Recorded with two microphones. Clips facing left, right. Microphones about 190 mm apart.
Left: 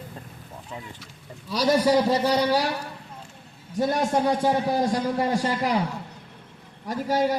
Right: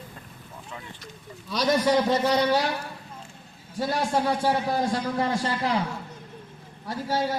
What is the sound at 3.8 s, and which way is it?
Speech, 20° left (ahead or behind).